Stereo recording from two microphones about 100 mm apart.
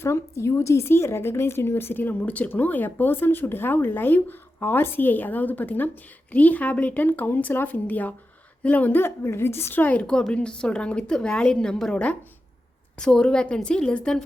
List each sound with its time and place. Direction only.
0.0 s a woman's voice: 25° left (ahead or behind); by 14.3 s 5° left (ahead or behind)